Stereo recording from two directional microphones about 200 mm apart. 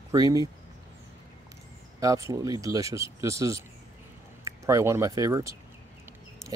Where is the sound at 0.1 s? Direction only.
20° right (ahead or behind).